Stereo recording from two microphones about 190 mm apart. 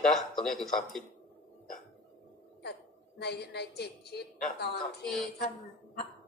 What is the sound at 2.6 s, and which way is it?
A woman's voice, 60° left (ahead or behind).